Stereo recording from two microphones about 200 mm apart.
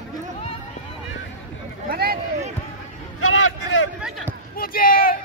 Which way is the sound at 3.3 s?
80° left.